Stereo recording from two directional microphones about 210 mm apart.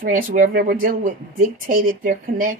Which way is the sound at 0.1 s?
40° right (ahead or behind).